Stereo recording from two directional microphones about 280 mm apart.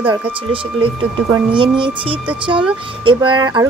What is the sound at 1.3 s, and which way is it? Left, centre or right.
A woman's voice, centre.